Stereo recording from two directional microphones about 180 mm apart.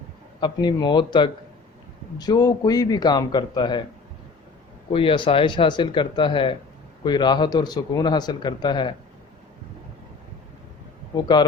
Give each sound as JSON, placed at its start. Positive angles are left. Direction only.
{"t": 0.3, "sound": "a man's voice", "side_deg": 25}
{"t": 4.9, "sound": "a man's voice", "side_deg": 30}
{"t": 11.1, "sound": "a man's voice", "side_deg": 25}